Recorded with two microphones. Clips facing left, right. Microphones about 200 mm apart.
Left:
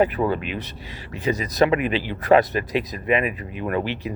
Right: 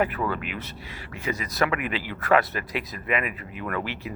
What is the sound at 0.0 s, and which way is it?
Speech, 20° left (ahead or behind).